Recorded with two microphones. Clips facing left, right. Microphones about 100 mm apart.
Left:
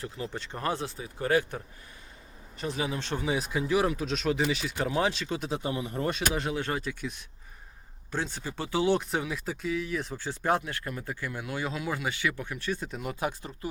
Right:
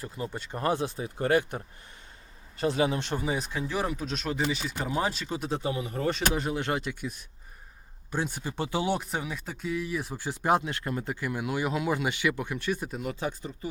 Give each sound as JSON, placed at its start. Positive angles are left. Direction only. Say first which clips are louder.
{"t": 0.3, "sound": "speech", "louder": "right 4 dB", "side_deg": -10}
{"t": 2.6, "sound": "speech", "louder": "right 6 dB", "side_deg": -40}
{"t": 3.0, "sound": "speech", "louder": "right 1 dB", "side_deg": -15}
{"t": 3.2, "sound": "speech", "louder": "left 2 dB", "side_deg": 5}
{"t": 6.6, "sound": "speech", "louder": "right 2 dB", "side_deg": -25}
{"t": 8.1, "sound": "speech", "louder": "right 2 dB", "side_deg": -15}
{"t": 9.0, "sound": "speech", "louder": "left 2 dB", "side_deg": 0}
{"t": 12.9, "sound": "speech", "louder": "right 2 dB", "side_deg": 0}